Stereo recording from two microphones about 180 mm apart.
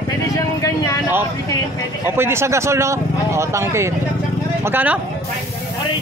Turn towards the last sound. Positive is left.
turn(degrees=-10)  # may be behind; listen again after turning